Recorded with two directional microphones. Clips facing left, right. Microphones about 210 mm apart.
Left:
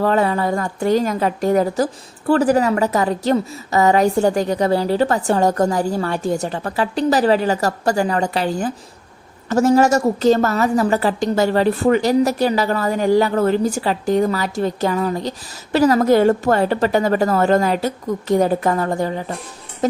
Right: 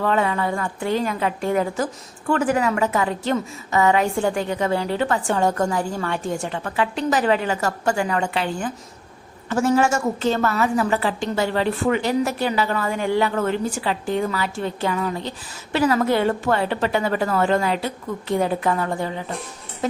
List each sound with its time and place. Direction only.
0.0 s a woman's voice: 35° left (ahead or behind)